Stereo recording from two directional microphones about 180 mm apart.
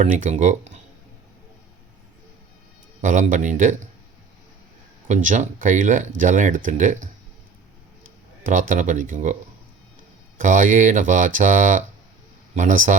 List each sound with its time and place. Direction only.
0.0 s speech: 45° right (ahead or behind)
3.0 s speech: 45° right (ahead or behind)
5.0 s speech: 45° right (ahead or behind)
8.4 s speech: 45° right (ahead or behind)